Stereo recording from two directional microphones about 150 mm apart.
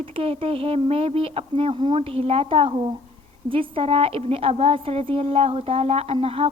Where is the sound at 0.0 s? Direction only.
40° right (ahead or behind).